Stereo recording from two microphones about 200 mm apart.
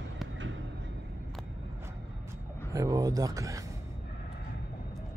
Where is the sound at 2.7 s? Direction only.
20° right (ahead or behind).